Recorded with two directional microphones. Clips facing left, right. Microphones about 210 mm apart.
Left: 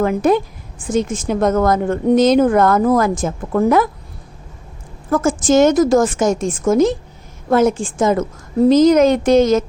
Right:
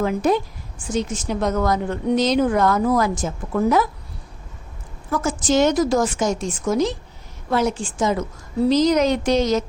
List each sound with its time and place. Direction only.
0.0 s a woman's voice: 55° left (ahead or behind)
5.1 s a woman's voice: 50° left (ahead or behind)